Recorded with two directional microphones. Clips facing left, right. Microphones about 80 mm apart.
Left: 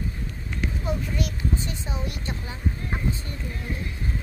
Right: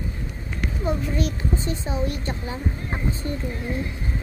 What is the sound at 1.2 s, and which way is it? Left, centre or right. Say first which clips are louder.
A child's voice: right 3 dB; right.